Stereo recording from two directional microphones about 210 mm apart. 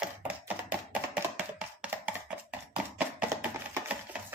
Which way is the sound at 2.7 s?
5° right (ahead or behind).